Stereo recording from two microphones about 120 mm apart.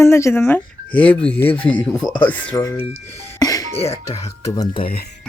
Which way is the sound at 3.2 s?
30° left (ahead or behind).